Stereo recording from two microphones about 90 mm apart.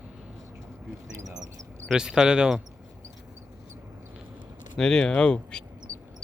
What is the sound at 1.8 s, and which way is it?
Speech, 5° right (ahead or behind).